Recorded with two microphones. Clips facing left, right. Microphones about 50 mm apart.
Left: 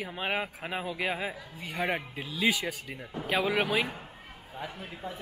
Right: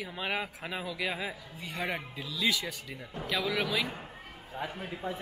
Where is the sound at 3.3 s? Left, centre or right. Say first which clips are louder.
Left 4 dB; left.